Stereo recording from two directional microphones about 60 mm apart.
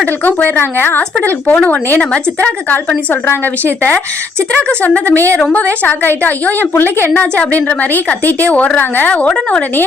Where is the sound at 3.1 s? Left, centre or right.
Left.